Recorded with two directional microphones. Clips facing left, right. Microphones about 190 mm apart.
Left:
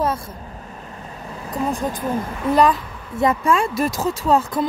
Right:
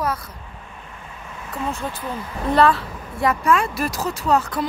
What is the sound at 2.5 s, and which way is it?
Speech, 15° left (ahead or behind).